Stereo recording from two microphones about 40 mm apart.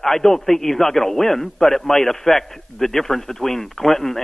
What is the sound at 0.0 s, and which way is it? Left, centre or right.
A man's voice, centre.